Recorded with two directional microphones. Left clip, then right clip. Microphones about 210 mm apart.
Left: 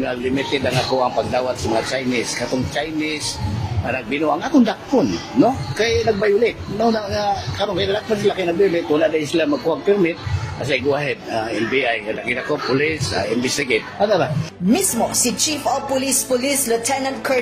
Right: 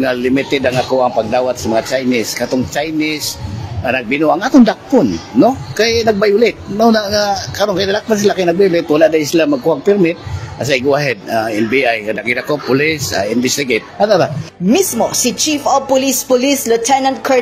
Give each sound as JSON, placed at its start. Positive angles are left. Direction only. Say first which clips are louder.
{"t": 0.0, "sound": "a man's voice", "louder": "right 7 dB", "side_deg": -55}
{"t": 14.7, "sound": "speech", "louder": "right 6 dB", "side_deg": -40}